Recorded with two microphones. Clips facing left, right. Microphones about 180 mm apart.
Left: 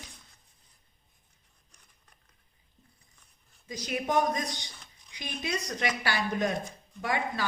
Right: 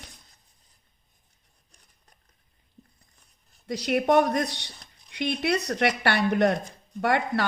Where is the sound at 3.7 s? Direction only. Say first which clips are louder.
Right 9 dB; 70° right (ahead or behind).